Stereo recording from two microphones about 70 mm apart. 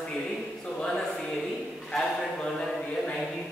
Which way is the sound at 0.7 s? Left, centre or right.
Centre.